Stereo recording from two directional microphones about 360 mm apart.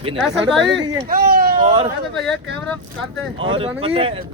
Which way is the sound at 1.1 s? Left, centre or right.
Right.